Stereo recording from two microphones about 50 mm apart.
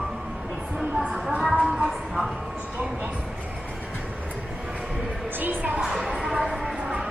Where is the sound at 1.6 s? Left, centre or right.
Centre.